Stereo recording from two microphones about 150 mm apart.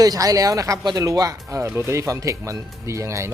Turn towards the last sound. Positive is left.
turn(degrees=-20)  # may be behind; listen again after turning